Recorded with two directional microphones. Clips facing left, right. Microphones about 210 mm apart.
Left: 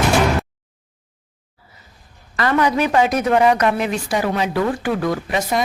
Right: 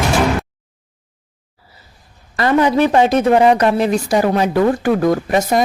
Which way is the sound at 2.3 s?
30° right (ahead or behind).